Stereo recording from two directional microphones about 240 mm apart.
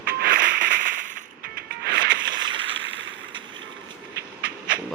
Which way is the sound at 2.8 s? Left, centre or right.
Right.